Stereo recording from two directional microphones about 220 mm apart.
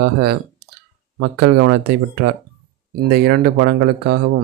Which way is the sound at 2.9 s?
45° right (ahead or behind).